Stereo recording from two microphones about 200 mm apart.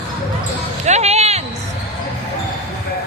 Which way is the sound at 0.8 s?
35° right (ahead or behind).